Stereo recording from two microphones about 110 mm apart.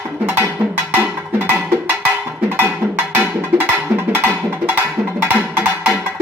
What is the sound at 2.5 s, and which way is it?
Music, 20° right (ahead or behind).